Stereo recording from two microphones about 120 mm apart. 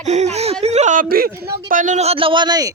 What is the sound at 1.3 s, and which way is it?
Speech, 20° right (ahead or behind).